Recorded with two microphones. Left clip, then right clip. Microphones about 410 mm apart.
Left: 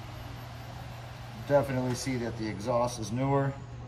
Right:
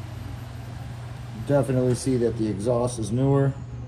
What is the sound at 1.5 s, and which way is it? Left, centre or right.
Speech, centre.